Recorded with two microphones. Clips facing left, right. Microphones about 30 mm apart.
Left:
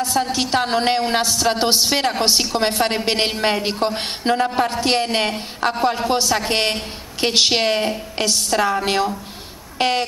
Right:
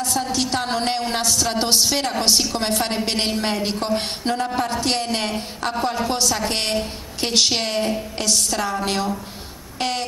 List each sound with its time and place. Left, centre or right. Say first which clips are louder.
0.2 s a woman's voice: left 3 dB; centre